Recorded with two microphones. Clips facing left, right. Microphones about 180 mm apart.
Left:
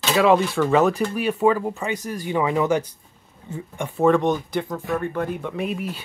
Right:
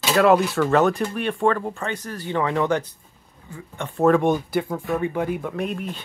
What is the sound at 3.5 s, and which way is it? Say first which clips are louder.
Speech: left 3 dB; 20° left (ahead or behind).